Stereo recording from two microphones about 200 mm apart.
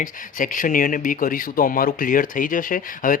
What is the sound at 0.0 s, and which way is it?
Speech, 40° left (ahead or behind).